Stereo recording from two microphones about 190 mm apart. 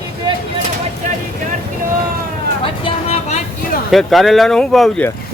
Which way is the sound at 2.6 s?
30° left (ahead or behind).